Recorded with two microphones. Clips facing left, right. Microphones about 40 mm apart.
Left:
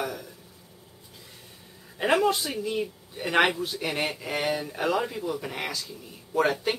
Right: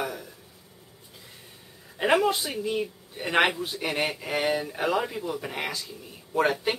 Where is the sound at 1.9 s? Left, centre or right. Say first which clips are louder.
Even; centre.